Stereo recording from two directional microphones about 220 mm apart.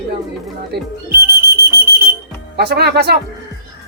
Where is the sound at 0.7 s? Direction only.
50° right (ahead or behind).